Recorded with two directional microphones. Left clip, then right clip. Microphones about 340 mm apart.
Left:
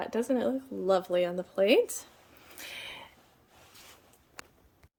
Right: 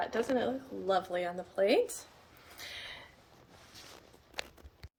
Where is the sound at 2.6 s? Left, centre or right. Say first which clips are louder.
Left 3 dB; left.